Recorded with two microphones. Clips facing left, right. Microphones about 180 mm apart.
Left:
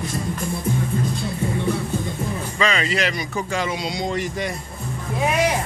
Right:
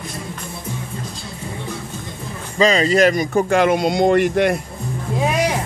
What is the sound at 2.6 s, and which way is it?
Speech, 35° right (ahead or behind).